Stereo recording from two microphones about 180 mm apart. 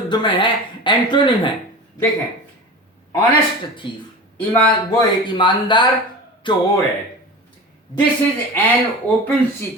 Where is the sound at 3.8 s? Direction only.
25° left (ahead or behind).